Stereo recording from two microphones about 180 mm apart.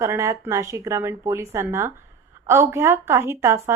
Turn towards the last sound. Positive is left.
turn(degrees=-15)  # may be behind; listen again after turning